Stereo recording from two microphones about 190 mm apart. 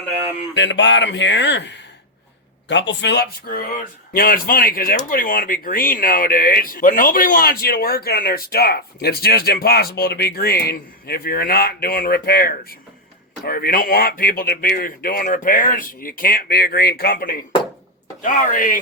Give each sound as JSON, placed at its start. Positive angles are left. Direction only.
{"t": 0.5, "sound": "speech", "side_deg": 70}
{"t": 4.1, "sound": "speech", "side_deg": 50}
{"t": 18.2, "sound": "speech", "side_deg": 40}